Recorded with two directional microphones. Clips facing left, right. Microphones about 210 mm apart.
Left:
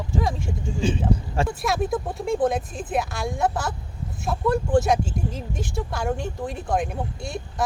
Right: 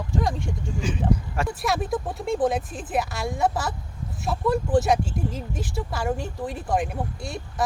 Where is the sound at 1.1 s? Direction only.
30° left (ahead or behind).